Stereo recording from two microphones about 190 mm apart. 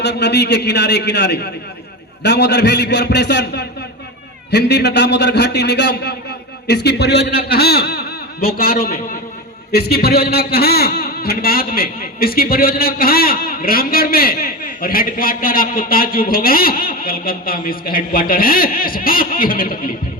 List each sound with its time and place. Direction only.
0.0 s a man's voice: 60° left (ahead or behind)